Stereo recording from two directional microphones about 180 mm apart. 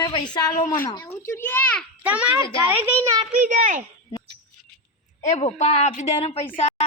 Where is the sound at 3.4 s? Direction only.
45° right (ahead or behind).